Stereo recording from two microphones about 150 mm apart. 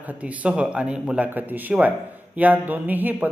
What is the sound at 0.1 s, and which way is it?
Speech, 10° right (ahead or behind).